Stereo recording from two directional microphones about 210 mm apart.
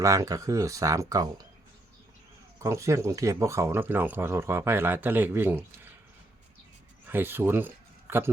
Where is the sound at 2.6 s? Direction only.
15° right (ahead or behind).